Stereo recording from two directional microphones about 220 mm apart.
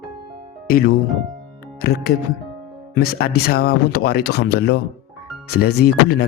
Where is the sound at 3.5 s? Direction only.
45° left (ahead or behind).